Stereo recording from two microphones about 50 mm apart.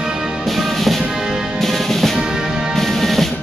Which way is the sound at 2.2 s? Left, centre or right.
Centre.